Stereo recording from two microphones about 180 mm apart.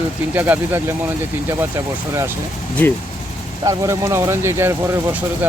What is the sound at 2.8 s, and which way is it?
Speech, 10° left (ahead or behind).